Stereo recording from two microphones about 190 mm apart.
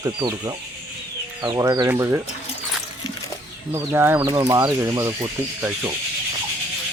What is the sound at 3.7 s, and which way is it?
Speech, 10° right (ahead or behind).